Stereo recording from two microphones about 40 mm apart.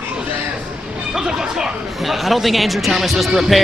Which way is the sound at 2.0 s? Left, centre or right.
Centre.